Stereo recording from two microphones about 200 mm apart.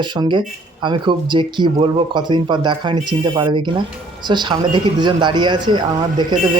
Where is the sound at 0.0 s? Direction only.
25° right (ahead or behind).